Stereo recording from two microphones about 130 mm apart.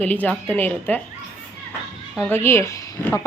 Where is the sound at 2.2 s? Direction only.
15° left (ahead or behind).